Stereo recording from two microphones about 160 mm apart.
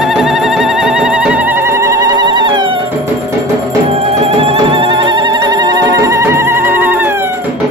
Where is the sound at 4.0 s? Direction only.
40° right (ahead or behind); by 7.3 s 15° right (ahead or behind).